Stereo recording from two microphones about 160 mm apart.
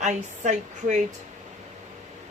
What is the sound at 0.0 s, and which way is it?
A woman's voice, 50° right (ahead or behind).